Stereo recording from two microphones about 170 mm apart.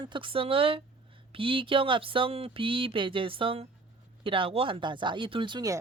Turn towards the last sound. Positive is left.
turn(degrees=-25)  # may be behind; listen again after turning